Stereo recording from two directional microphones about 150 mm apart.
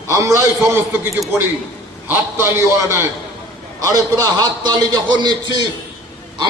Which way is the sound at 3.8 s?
25° right (ahead or behind).